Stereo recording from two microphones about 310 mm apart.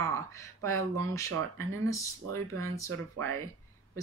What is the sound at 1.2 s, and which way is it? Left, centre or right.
Speech, right.